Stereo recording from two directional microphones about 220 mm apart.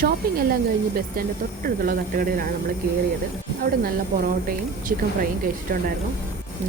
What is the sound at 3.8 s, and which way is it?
Speech, 40° right (ahead or behind).